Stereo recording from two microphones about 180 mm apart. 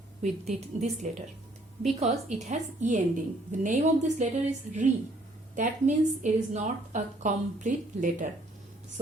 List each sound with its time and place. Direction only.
0.2 s a woman's voice: 40° right (ahead or behind)